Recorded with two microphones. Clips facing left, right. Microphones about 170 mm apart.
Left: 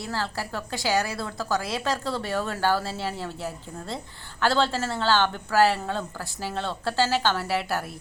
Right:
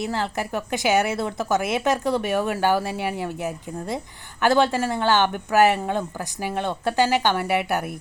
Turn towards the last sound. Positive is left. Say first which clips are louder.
# right 4 dB
turn(degrees=-20)  # may be behind; listen again after turning